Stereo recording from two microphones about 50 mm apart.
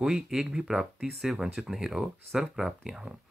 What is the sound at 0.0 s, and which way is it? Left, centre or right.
Speech, centre.